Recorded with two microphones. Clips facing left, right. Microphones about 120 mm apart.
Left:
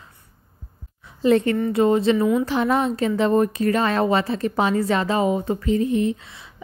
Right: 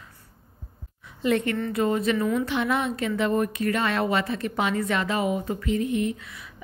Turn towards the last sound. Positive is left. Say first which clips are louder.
# left 5 dB
turn(degrees=30)  # may be behind; listen again after turning